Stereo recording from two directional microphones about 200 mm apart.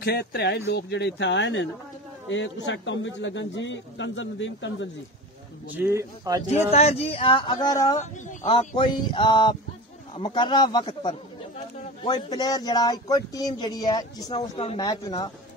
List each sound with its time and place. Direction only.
0.0 s a man's voice: 55° left (ahead or behind)
5.8 s speech: 15° right (ahead or behind)
6.7 s speech: 30° left (ahead or behind)
8.0 s a sound: 35° left (ahead or behind)
8.5 s speech: 25° left (ahead or behind)